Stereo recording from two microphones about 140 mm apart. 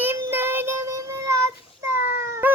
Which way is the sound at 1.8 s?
20° right (ahead or behind).